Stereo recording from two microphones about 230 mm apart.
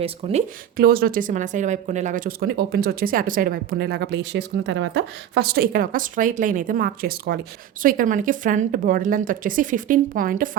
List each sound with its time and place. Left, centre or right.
0.0 s speech: right
0.8 s speech: right